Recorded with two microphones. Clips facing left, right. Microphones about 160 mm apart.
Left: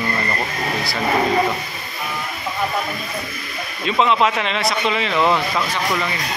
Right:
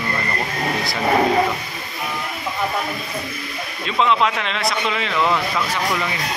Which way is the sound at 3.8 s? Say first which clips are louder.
Left 1 dB; 5° left (ahead or behind).